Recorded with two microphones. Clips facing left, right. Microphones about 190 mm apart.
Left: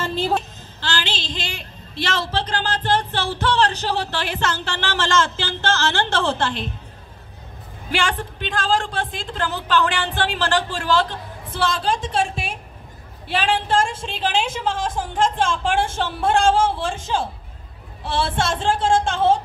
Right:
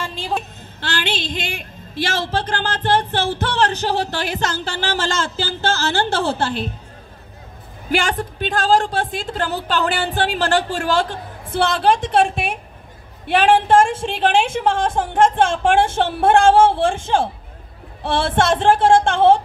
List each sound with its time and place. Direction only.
0.4 s a sound: 55° right (ahead or behind)
3.3 s speech: 45° right (ahead or behind)
7.9 s a woman's voice: 40° right (ahead or behind); by 19.4 s 60° right (ahead or behind)